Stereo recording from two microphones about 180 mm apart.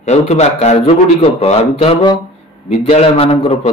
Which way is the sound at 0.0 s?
40° left (ahead or behind).